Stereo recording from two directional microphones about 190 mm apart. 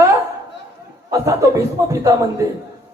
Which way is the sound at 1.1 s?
15° right (ahead or behind).